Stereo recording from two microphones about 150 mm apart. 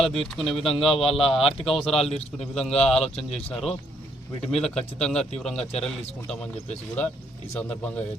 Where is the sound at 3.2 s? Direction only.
40° left (ahead or behind).